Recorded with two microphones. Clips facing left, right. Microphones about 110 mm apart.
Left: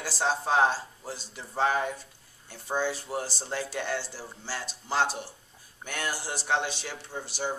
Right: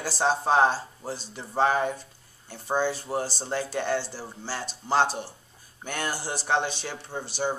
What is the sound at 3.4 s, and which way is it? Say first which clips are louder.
Speech: right 4 dB; 25° right (ahead or behind).